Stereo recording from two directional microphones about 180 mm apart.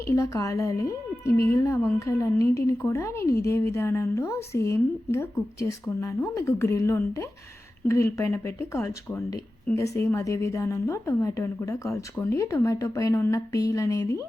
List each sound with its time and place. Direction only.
0.1 s a woman's voice: 15° left (ahead or behind)